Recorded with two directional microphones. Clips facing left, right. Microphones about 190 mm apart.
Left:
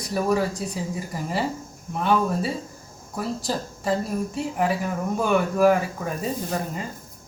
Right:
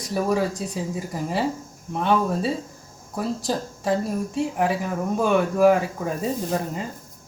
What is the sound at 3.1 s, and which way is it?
Speech, 20° right (ahead or behind).